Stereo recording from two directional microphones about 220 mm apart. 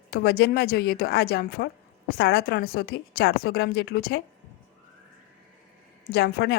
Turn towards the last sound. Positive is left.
turn(degrees=45)  # may be behind; listen again after turning